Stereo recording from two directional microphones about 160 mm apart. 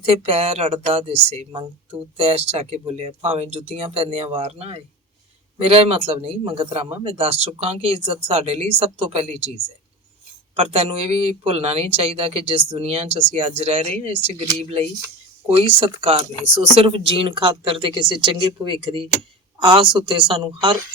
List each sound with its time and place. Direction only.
0.0 s speech: 35° right (ahead or behind)
10.5 s speech: 40° right (ahead or behind)